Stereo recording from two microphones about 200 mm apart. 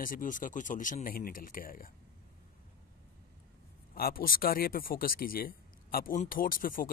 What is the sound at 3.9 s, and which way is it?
Speech, 45° left (ahead or behind).